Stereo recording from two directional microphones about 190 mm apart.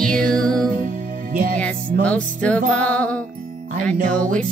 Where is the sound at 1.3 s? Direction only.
45° right (ahead or behind).